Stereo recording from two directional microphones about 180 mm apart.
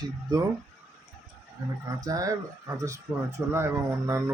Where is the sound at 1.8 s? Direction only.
20° right (ahead or behind).